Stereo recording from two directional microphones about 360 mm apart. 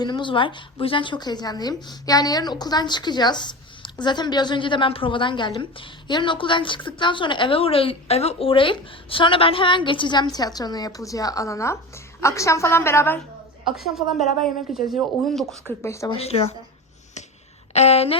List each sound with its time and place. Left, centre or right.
0.0 s a woman's voice: centre
17.7 s a woman's voice: centre